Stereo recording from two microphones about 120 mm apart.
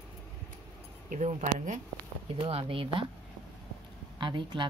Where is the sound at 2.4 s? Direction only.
50° right (ahead or behind).